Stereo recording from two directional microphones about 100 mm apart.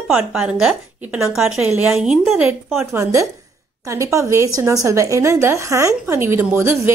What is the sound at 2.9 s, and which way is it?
A woman's voice, 30° right (ahead or behind).